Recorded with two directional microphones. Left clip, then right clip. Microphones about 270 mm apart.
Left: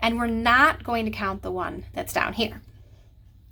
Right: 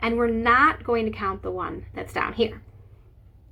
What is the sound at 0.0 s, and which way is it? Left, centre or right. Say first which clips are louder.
A woman's voice: right 1 dB; left.